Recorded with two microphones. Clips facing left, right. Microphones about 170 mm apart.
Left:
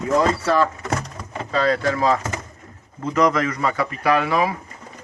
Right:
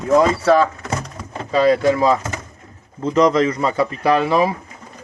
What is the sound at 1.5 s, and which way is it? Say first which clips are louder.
A man's voice: right 6 dB; 15° right (ahead or behind).